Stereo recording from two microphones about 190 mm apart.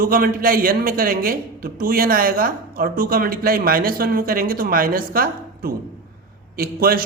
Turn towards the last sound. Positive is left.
turn(degrees=-50)  # may be behind; listen again after turning